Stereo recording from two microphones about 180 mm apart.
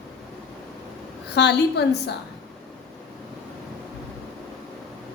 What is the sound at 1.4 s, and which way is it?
Speech, 70° left (ahead or behind).